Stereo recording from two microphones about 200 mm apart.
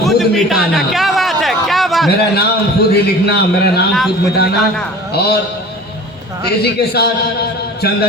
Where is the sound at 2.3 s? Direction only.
55° left (ahead or behind).